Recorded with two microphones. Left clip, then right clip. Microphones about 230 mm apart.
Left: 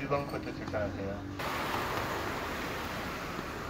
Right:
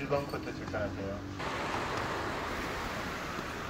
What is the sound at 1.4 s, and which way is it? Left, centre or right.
Vehicle, centre.